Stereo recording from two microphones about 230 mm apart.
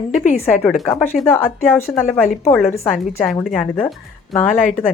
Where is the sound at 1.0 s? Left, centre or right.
Centre.